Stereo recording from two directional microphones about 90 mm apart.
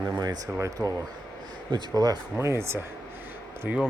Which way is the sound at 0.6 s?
35° right (ahead or behind).